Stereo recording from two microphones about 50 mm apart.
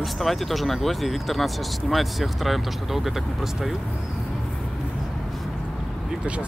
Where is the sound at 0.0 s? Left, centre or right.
Centre.